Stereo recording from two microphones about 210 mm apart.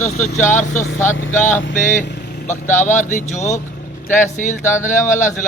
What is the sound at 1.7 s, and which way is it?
Speech, 35° left (ahead or behind).